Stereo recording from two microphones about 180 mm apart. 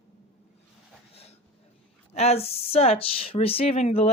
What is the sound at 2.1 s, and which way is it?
Speech, 35° left (ahead or behind).